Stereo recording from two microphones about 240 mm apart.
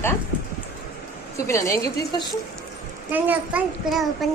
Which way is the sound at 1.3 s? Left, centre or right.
Centre.